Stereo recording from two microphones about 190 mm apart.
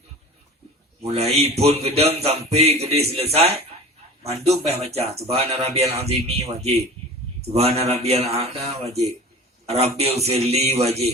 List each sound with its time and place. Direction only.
1.1 s speech: 35° right (ahead or behind)